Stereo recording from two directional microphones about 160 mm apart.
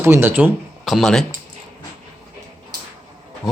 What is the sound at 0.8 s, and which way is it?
Speech, centre (ahead or behind).